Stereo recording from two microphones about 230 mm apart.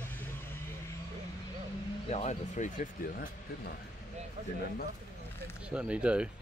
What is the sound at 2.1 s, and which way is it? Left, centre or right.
Speech, left.